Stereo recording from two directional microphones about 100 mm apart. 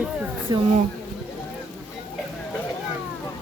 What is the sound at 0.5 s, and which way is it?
Speech, 45° right (ahead or behind).